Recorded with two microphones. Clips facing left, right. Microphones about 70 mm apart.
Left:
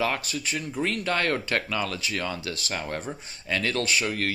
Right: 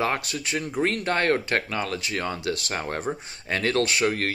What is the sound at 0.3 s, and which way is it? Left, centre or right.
Speech, right.